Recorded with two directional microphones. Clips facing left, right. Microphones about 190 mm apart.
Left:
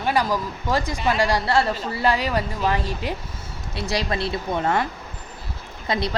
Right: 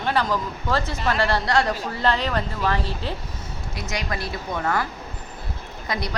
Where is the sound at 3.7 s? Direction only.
30° left (ahead or behind).